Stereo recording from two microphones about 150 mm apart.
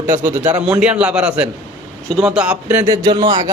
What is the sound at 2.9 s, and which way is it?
Speech, 30° right (ahead or behind).